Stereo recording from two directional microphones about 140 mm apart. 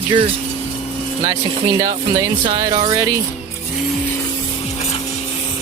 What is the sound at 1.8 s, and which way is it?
Speech, 30° right (ahead or behind).